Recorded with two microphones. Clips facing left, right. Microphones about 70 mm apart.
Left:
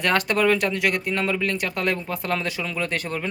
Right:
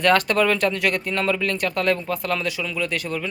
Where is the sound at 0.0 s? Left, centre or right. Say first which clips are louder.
Right 3 dB; centre.